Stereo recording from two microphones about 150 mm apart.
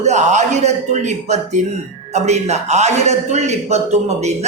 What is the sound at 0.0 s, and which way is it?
A woman's voice, 50° right (ahead or behind).